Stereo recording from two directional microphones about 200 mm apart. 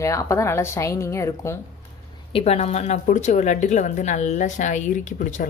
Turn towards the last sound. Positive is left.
turn(degrees=40)  # may be behind; listen again after turning